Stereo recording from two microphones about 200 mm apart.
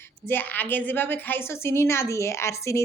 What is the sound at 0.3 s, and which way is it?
A woman's voice, 10° left (ahead or behind).